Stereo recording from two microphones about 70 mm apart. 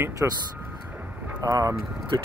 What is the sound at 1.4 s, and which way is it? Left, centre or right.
Speech, right.